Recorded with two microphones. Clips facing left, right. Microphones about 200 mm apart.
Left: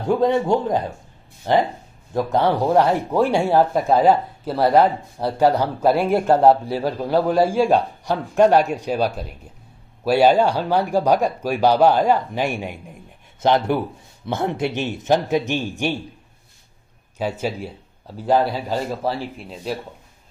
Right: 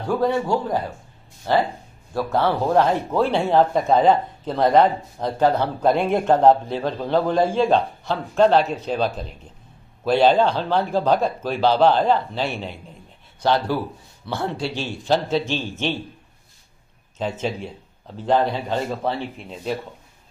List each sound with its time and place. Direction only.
0.0 s a man's voice: 20° left (ahead or behind)
17.2 s speech: 10° left (ahead or behind)